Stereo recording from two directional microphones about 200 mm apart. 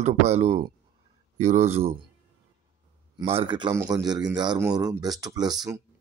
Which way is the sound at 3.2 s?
25° right (ahead or behind).